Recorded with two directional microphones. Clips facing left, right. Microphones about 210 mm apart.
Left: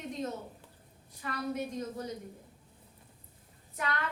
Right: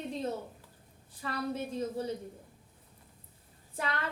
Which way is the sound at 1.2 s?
30° right (ahead or behind).